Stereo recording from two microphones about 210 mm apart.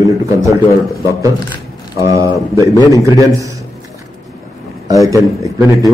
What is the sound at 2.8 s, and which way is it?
Speech, 15° left (ahead or behind).